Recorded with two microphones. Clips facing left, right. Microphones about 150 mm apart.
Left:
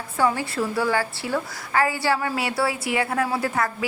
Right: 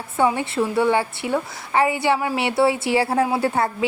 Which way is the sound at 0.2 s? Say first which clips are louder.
Right 3 dB; 25° right (ahead or behind).